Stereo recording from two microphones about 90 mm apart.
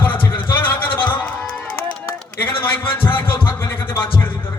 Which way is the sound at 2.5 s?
75° left (ahead or behind).